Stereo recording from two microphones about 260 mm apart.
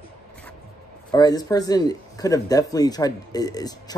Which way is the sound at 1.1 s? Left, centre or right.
Centre.